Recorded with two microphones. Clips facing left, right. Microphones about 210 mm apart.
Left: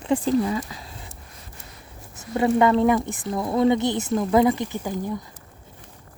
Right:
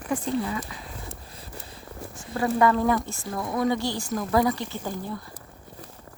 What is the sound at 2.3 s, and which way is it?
Speech, 25° left (ahead or behind).